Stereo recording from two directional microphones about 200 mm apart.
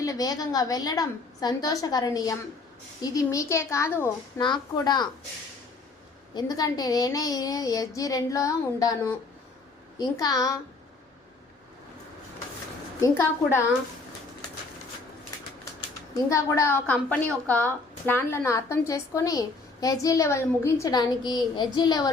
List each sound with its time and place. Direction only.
0.0 s a woman's voice: 15° left (ahead or behind)
4.4 s a woman's voice: 20° left (ahead or behind)
6.3 s a woman's voice: 20° left (ahead or behind)
13.0 s a woman's voice: 15° left (ahead or behind)
16.1 s a woman's voice: 15° left (ahead or behind)